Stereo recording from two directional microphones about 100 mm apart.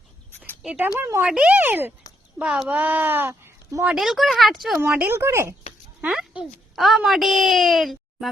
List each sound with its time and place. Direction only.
0.6 s speech: 10° right (ahead or behind)
2.4 s speech: 10° right (ahead or behind); by 3.8 s 25° right (ahead or behind)
3.9 s speech: centre (ahead or behind)
4.9 s speech: 25° right (ahead or behind)
6.0 s speech: 10° right (ahead or behind)